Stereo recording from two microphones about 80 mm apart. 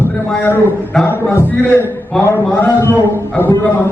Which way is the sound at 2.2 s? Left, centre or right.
Left.